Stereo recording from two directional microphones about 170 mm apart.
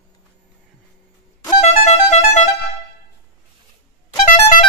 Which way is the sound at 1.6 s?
45° left (ahead or behind).